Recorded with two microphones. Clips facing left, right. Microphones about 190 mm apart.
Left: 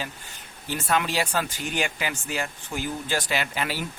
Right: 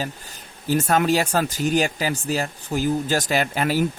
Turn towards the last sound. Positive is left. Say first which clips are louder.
# right 8 dB
turn(degrees=-45)  # may be behind; listen again after turning